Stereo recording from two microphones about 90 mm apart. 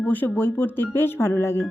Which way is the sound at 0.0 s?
20° left (ahead or behind).